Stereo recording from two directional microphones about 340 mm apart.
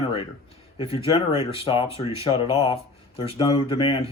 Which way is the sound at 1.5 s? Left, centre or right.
Centre.